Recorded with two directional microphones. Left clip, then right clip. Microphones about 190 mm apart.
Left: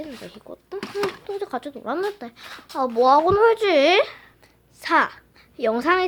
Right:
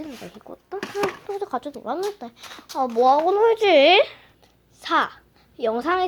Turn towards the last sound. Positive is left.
turn(degrees=10)  # may be behind; listen again after turning